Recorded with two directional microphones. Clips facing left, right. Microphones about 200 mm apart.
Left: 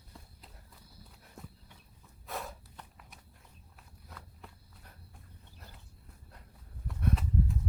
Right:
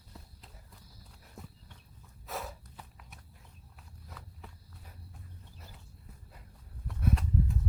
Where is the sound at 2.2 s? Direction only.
Centre (ahead or behind).